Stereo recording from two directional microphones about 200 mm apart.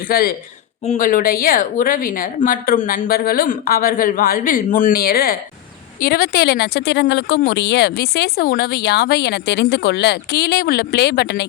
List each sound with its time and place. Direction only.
0.1 s a woman's voice: 50° left (ahead or behind)